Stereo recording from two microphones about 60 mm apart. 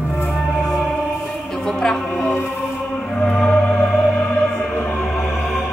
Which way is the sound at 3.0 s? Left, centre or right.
Centre.